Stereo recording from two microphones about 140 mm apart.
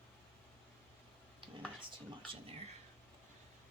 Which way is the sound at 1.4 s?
40° right (ahead or behind).